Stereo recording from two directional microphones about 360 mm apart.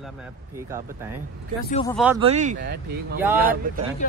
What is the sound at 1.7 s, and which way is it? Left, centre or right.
Speech, centre.